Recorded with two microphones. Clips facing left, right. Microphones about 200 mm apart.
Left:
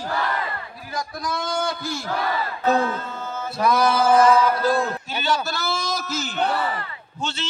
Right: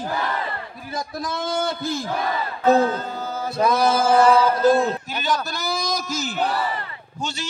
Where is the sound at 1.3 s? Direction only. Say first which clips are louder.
Right 1 dB; 20° right (ahead or behind).